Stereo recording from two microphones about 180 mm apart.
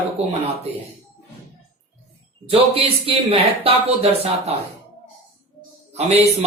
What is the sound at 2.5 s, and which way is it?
Speech, 30° right (ahead or behind).